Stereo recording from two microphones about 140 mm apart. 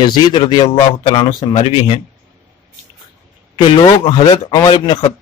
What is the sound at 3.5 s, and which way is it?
A man's voice, 35° left (ahead or behind).